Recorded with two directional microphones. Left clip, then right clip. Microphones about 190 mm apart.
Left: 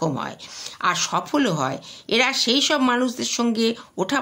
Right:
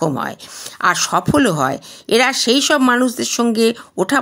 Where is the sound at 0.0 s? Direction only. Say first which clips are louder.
Right 6 dB; 35° right (ahead or behind).